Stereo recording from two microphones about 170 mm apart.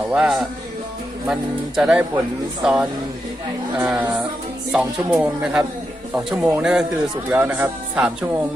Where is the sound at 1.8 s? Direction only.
5° right (ahead or behind).